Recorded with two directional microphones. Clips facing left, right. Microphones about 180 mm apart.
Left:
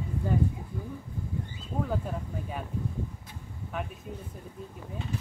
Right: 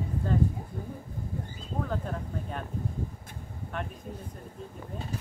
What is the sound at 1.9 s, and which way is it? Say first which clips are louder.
Speech: left 1 dB; 5° left (ahead or behind).